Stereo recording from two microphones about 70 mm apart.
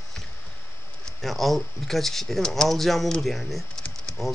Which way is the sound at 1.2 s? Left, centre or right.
Centre.